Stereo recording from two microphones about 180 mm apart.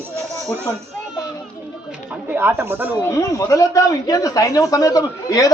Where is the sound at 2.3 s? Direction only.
10° right (ahead or behind).